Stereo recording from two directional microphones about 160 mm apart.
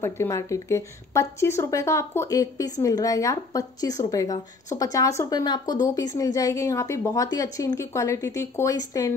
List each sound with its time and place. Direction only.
0.0 s a woman's voice: 15° left (ahead or behind)